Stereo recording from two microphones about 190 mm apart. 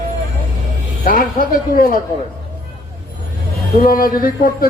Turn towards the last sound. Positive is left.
turn(degrees=50)  # may be behind; listen again after turning